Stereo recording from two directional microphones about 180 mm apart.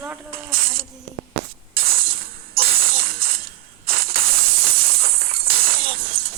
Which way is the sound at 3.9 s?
55° right (ahead or behind).